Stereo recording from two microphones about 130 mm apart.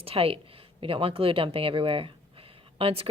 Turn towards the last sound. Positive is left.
turn(degrees=-45)  # may be behind; listen again after turning